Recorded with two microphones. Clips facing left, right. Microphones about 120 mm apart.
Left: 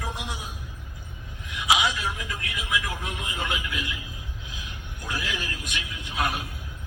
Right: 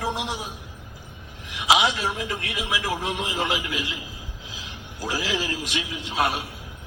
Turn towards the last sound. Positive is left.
turn(degrees=-25)  # may be behind; listen again after turning